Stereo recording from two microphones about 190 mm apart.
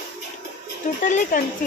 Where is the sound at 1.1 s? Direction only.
40° left (ahead or behind).